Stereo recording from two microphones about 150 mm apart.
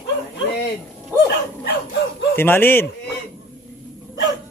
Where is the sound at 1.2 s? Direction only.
90° left.